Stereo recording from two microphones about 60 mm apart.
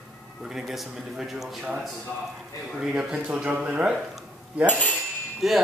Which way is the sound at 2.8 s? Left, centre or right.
Centre.